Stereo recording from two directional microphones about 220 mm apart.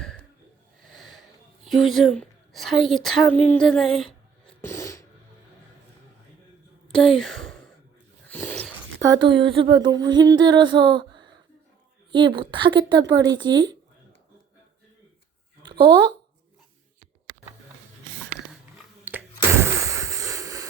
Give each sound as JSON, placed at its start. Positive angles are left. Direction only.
{"t": 0.0, "sound": "snort", "side_deg": 5}
{"t": 0.8, "sound": "wheeze", "side_deg": 0}
{"t": 1.6, "sound": "a woman's voice", "side_deg": 0}
{"t": 4.6, "sound": "sneeze", "side_deg": 15}
{"t": 6.9, "sound": "a sound", "side_deg": 0}
{"t": 8.3, "sound": "dog", "side_deg": 10}
{"t": 9.0, "sound": "a sound", "side_deg": -20}
{"t": 15.6, "sound": "speech", "side_deg": -20}
{"t": 19.0, "sound": "a sound", "side_deg": -10}